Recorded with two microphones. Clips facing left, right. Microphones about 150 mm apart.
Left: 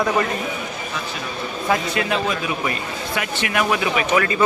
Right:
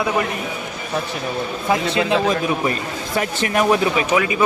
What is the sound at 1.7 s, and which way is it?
Speech, 25° right (ahead or behind).